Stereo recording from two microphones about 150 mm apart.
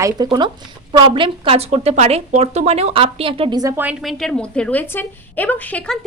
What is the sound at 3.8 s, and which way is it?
A woman's voice, centre (ahead or behind).